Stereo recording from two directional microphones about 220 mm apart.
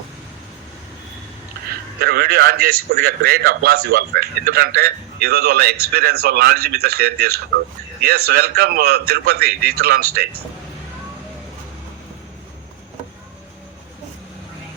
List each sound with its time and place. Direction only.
2.0 s a man's voice: 45° right (ahead or behind)